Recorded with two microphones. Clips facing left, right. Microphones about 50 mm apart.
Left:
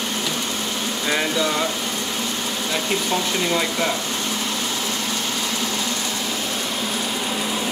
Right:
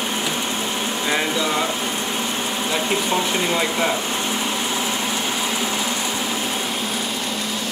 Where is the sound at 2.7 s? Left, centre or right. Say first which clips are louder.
Right 1 dB; centre.